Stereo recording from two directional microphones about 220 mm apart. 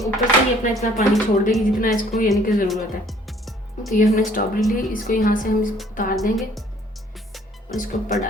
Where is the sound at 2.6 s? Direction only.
Centre (ahead or behind).